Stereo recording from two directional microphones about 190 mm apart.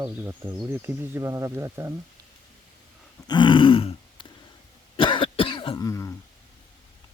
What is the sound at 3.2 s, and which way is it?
Grunt, 25° left (ahead or behind).